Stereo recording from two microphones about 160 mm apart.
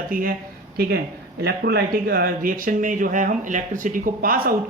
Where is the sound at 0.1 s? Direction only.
60° right (ahead or behind).